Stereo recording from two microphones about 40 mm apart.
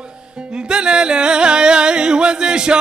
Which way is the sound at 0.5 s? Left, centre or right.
Right.